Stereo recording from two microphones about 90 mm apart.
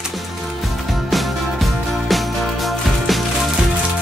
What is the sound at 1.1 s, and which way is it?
Music, centre (ahead or behind).